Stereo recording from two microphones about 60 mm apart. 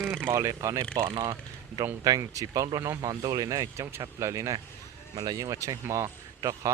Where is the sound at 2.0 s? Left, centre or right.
Right.